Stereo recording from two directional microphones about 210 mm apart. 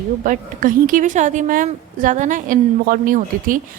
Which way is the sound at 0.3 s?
40° right (ahead or behind).